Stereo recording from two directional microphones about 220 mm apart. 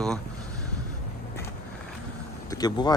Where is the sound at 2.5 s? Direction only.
20° left (ahead or behind).